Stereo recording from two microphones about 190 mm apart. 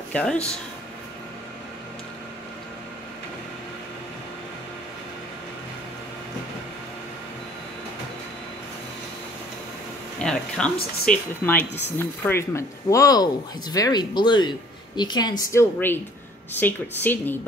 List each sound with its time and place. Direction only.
0.1 s speech: 5° left (ahead or behind)
10.2 s a woman's voice: 5° left (ahead or behind)